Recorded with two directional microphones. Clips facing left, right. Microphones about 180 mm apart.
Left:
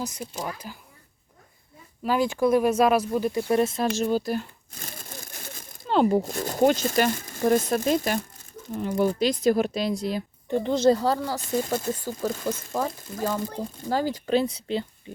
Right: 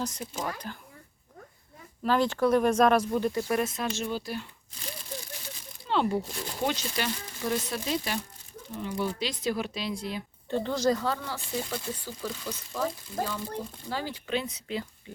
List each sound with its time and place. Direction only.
0.0 s speech: 10° left (ahead or behind)
2.0 s speech: 10° left (ahead or behind)
3.5 s speech: 30° left (ahead or behind)
3.9 s speech: 40° left (ahead or behind)
10.5 s speech: 20° left (ahead or behind)